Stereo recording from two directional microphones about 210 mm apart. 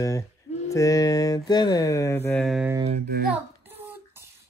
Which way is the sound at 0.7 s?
15° left (ahead or behind).